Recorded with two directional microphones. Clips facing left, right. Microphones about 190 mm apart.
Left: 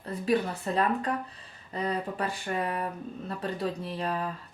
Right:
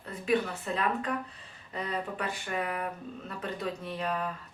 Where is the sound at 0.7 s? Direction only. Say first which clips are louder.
Left 5 dB; 35° left (ahead or behind).